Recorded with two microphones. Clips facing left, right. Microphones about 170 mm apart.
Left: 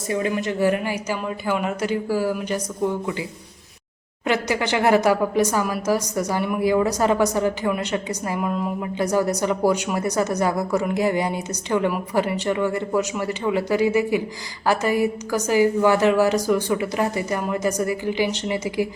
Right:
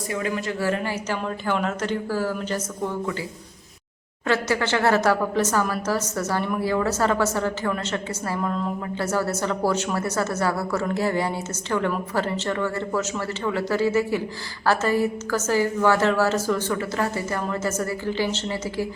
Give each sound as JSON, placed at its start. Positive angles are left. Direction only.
{"t": 0.1, "sound": "a woman's voice", "side_deg": 20}
{"t": 4.3, "sound": "a woman's voice", "side_deg": 15}